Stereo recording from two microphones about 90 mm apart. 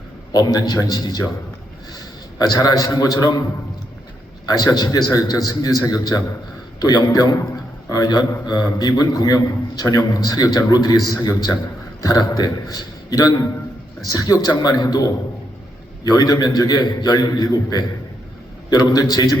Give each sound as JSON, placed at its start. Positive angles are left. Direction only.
{"t": 0.3, "sound": "a man's voice", "side_deg": 45}
{"t": 4.4, "sound": "a man's voice", "side_deg": 45}